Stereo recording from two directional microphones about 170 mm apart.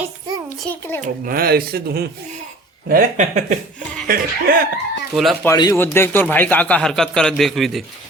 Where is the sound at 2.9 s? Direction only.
50° right (ahead or behind).